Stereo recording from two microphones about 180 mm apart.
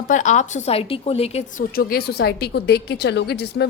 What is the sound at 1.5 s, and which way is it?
A woman's voice, 50° left (ahead or behind).